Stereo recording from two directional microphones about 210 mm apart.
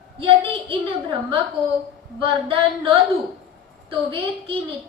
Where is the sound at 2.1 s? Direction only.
25° right (ahead or behind).